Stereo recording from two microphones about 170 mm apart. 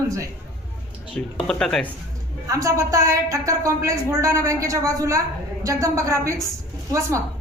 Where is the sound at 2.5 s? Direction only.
20° right (ahead or behind).